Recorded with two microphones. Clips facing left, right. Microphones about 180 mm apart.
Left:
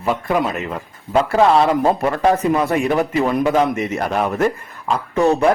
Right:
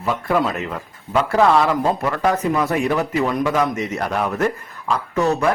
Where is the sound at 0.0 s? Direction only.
20° left (ahead or behind).